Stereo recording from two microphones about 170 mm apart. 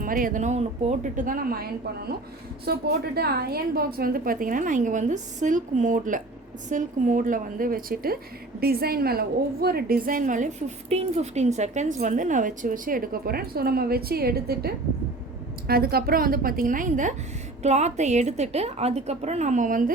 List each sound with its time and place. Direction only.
0.0 s a woman's voice: 55° right (ahead or behind)